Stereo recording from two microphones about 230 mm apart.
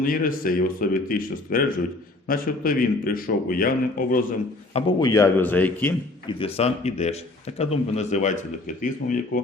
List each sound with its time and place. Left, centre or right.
0.0 s a man's voice: left
4.7 s speech: centre
6.2 s a man's voice: left